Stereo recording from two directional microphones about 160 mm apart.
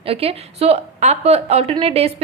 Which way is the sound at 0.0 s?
35° right (ahead or behind).